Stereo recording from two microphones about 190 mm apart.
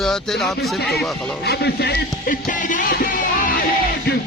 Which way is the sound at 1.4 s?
60° left (ahead or behind).